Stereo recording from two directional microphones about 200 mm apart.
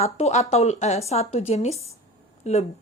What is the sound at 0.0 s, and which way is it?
A woman's voice, 35° left (ahead or behind).